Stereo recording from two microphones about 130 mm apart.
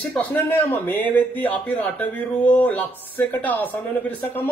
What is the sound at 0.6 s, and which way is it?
Speech, 15° left (ahead or behind).